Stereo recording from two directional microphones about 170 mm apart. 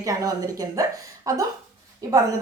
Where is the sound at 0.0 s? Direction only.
20° right (ahead or behind).